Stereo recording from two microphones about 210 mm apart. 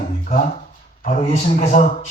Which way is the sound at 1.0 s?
35° left (ahead or behind).